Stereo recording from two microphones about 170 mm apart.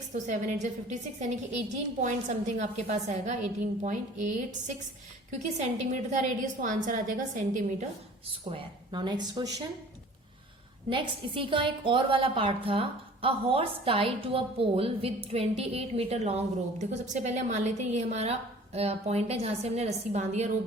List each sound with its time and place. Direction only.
0.1 s a woman's voice: 45° right (ahead or behind)
8.4 s speech: 30° right (ahead or behind)
10.8 s a woman's voice: 30° right (ahead or behind)